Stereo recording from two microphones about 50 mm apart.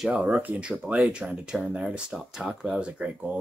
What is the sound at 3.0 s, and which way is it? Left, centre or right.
Speech, right.